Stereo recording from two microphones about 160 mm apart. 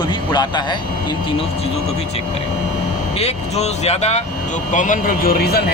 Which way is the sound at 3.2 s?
40° left (ahead or behind).